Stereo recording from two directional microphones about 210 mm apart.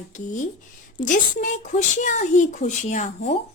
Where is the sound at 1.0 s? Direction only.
35° left (ahead or behind).